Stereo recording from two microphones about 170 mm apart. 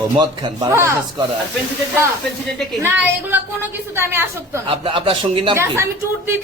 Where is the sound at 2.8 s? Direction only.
10° right (ahead or behind).